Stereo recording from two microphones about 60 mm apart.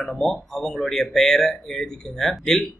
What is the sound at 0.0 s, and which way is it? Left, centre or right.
Speech, centre.